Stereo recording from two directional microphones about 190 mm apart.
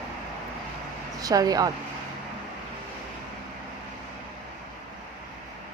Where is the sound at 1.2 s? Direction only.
20° right (ahead or behind).